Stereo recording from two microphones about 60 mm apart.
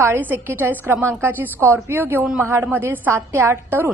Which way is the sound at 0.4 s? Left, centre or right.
Right.